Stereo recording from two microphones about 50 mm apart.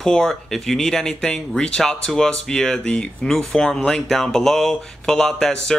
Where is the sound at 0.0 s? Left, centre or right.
Centre.